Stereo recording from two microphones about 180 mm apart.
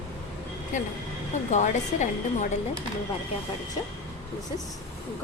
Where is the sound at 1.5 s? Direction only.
40° left (ahead or behind).